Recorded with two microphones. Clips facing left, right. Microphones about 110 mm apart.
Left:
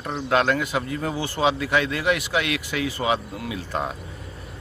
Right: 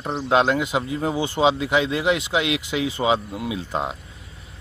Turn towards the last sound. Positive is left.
turn(degrees=-20)  # may be behind; listen again after turning